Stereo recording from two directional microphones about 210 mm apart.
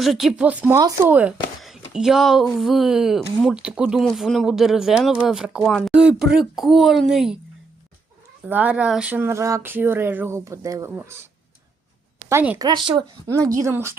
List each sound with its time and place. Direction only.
0.0 s speech: centre (ahead or behind)
8.4 s speech: 5° right (ahead or behind)
12.3 s speech: 10° right (ahead or behind)